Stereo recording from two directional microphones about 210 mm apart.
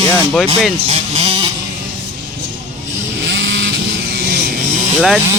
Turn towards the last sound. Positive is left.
turn(degrees=0)  # may be behind; listen again after turning